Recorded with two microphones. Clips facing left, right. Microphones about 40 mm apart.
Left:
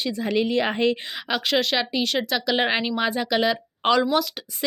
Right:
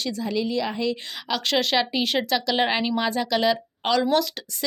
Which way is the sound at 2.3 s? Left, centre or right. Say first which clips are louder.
Even; centre.